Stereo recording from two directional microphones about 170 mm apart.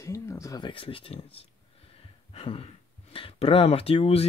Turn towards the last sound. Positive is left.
turn(degrees=35)  # may be behind; listen again after turning